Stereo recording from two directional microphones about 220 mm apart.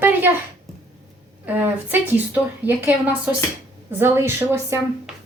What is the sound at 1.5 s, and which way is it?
Speech, 10° right (ahead or behind).